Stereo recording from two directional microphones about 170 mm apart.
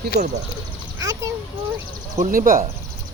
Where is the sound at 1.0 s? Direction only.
20° right (ahead or behind).